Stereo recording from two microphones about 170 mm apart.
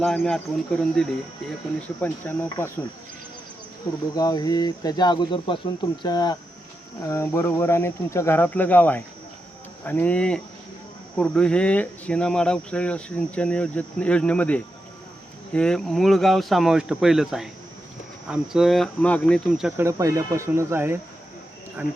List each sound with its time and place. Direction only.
0.0 s speech: 5° left (ahead or behind)
4.1 s speech: 20° left (ahead or behind); by 19.7 s centre (ahead or behind)
19.7 s speech: 15° right (ahead or behind)